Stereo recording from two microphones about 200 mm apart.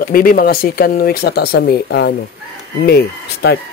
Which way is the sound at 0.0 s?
45° left (ahead or behind).